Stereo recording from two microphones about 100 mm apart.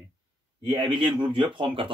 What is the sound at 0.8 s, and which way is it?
Speech, 50° right (ahead or behind).